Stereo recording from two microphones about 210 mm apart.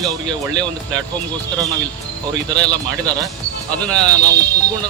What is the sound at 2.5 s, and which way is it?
Speech, 5° left (ahead or behind).